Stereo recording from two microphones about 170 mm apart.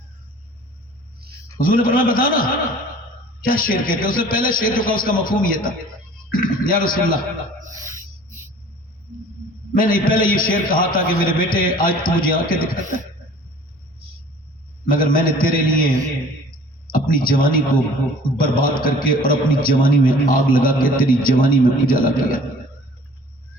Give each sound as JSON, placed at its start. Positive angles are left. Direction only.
{"t": 1.5, "sound": "a man's voice", "side_deg": 55}
{"t": 9.7, "sound": "a man's voice", "side_deg": 55}
{"t": 14.8, "sound": "a man's voice", "side_deg": 55}
{"t": 16.9, "sound": "a man's voice", "side_deg": 55}